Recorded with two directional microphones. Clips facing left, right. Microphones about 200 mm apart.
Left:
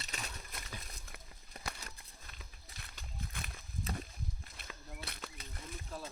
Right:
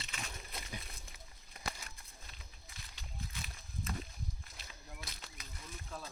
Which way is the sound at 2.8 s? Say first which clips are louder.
Left 1 dB; 55° left (ahead or behind).